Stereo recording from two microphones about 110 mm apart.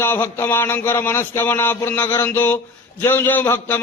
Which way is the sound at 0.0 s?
20° left (ahead or behind).